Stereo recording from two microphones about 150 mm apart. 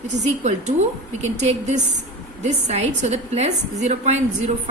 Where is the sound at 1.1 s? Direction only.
50° right (ahead or behind).